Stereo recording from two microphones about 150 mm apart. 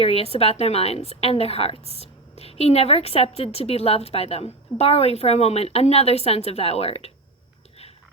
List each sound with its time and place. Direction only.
0.0 s a woman's voice: 40° left (ahead or behind)